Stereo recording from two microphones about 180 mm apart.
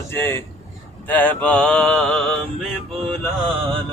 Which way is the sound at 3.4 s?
30° right (ahead or behind).